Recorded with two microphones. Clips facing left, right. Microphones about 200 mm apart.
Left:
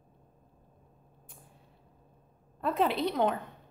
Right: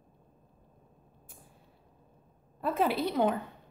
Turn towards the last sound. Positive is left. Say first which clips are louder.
# right 1 dB
turn(degrees=-5)  # may be behind; listen again after turning